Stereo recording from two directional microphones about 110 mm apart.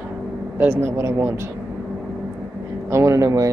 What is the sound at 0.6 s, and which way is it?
Speech, 20° right (ahead or behind).